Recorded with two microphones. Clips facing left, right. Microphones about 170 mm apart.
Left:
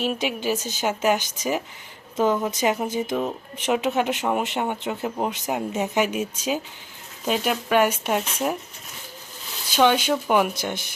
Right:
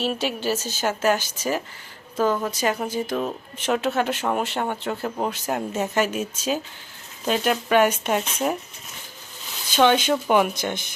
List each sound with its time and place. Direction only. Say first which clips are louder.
0.0 s a woman's voice: even; 15° left (ahead or behind)
9.6 s speech: right 1 dB; 10° left (ahead or behind)